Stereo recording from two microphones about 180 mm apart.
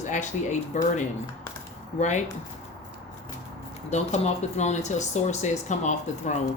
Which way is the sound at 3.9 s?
40° left (ahead or behind).